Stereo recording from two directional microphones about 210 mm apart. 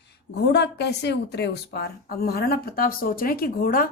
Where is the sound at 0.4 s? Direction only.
55° left (ahead or behind).